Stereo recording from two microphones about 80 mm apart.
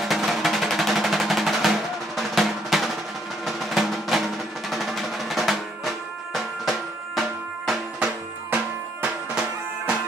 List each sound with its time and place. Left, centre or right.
0.0 s drum: centre
9.0 s music: centre